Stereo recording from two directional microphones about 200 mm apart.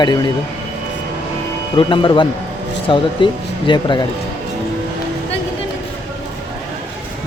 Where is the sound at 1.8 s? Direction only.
25° left (ahead or behind).